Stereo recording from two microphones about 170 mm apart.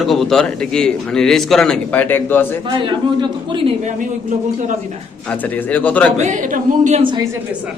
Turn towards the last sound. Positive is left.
turn(degrees=-25)  # may be behind; listen again after turning